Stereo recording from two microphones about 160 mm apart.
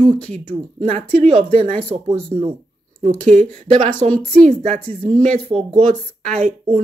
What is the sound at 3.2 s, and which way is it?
Speech, 5° left (ahead or behind).